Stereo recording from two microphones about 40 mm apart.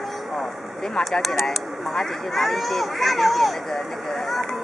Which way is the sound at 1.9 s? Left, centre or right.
Centre.